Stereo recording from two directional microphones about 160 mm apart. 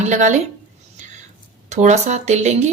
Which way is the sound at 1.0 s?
50° right (ahead or behind).